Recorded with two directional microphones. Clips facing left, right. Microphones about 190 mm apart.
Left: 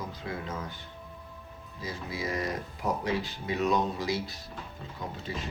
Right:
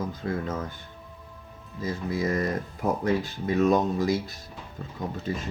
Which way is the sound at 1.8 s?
50° right (ahead or behind).